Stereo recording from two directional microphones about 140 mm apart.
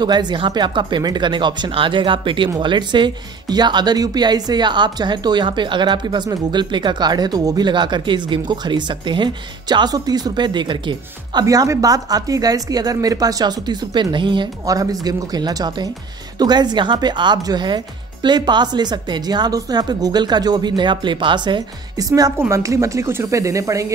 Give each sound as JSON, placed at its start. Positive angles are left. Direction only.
{"t": 0.0, "sound": "speech", "side_deg": -30}
{"t": 11.4, "sound": "speech", "side_deg": -25}